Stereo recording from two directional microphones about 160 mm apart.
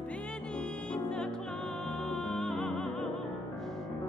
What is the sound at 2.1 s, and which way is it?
Music, centre (ahead or behind).